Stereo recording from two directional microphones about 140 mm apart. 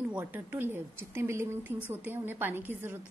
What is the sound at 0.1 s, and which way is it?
Speech, 10° right (ahead or behind).